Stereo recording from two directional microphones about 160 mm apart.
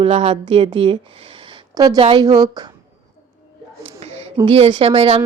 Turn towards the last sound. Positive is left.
turn(degrees=-35)  # may be behind; listen again after turning